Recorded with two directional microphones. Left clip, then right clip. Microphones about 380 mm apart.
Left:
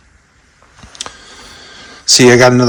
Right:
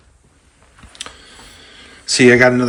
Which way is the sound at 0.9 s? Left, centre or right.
Centre.